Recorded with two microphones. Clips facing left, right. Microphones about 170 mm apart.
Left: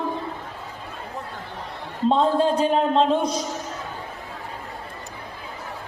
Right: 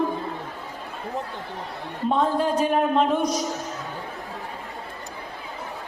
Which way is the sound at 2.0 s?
25° left (ahead or behind).